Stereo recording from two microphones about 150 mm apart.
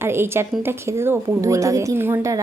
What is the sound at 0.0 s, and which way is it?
A woman's voice, 15° right (ahead or behind).